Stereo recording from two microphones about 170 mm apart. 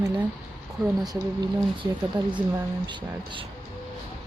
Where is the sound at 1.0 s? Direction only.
25° right (ahead or behind).